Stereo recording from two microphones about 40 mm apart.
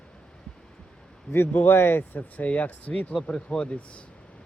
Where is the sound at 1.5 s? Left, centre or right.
Left.